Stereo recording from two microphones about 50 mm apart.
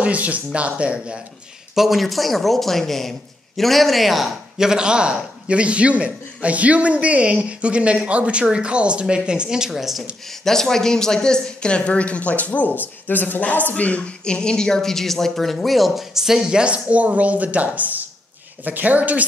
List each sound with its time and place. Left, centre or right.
0.0 s a man's voice: right
1.8 s speech: centre
4.6 s a man's voice: centre
9.7 s speech: centre
10.4 s a woman's voice: centre; by 19.2 s right